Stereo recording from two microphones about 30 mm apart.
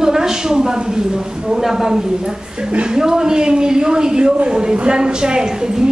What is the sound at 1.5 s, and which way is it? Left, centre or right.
A woman's voice, centre.